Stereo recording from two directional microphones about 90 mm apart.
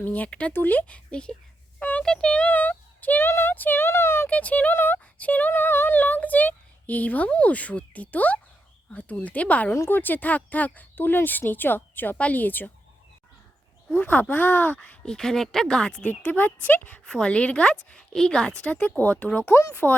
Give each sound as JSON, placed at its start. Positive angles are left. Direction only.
{"t": 0.0, "sound": "speech", "side_deg": 15}
{"t": 9.7, "sound": "speech", "side_deg": 25}
{"t": 13.9, "sound": "speech", "side_deg": 20}
{"t": 16.0, "sound": "speech", "side_deg": 20}